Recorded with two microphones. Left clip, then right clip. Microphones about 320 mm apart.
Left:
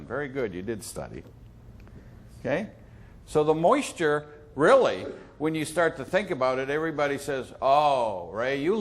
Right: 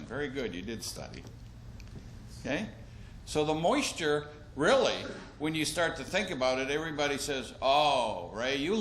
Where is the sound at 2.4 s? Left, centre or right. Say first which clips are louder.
Left 6 dB; left.